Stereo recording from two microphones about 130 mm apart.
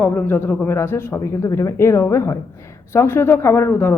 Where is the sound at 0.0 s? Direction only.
15° left (ahead or behind).